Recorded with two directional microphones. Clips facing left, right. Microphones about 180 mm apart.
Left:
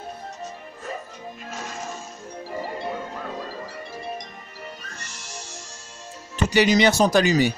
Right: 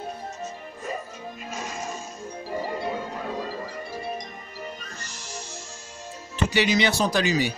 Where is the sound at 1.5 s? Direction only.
Centre (ahead or behind).